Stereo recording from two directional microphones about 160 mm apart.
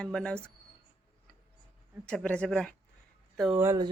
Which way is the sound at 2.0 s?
5° left (ahead or behind).